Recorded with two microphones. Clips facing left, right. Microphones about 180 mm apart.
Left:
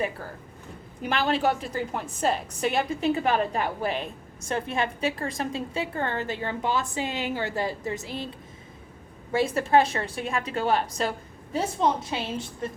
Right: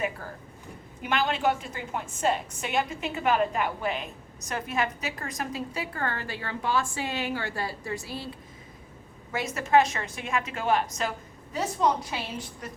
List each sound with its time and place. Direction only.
1.0 s a woman's voice: 35° left (ahead or behind); by 8.3 s 20° left (ahead or behind)
9.3 s a woman's voice: 30° left (ahead or behind)